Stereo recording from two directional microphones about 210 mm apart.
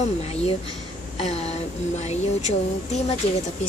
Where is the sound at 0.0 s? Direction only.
30° left (ahead or behind).